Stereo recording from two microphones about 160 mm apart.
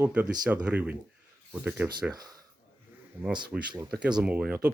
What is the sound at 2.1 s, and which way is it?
Speech, 25° right (ahead or behind).